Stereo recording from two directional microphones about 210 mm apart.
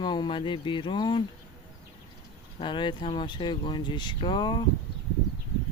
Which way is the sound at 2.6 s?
20° left (ahead or behind).